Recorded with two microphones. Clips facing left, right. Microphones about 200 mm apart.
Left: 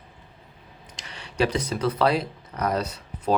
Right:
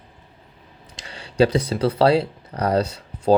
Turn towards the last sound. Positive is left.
turn(degrees=-30)  # may be behind; listen again after turning